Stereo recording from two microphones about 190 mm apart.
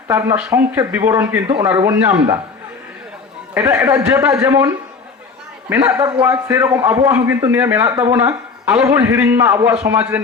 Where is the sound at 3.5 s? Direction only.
15° right (ahead or behind).